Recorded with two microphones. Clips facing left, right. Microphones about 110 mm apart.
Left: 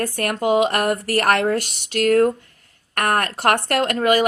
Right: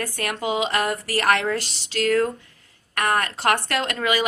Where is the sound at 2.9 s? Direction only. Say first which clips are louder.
Left 2 dB; 60° left (ahead or behind).